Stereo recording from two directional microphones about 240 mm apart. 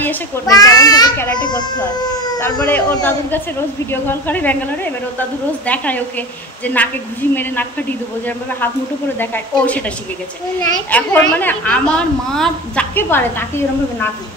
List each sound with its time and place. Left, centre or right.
0.0 s a woman's voice: centre
2.6 s a woman's voice: centre
5.7 s a woman's voice: centre
9.2 s a woman's voice: centre